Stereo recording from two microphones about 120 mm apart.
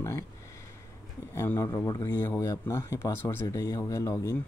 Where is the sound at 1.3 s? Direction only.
20° left (ahead or behind).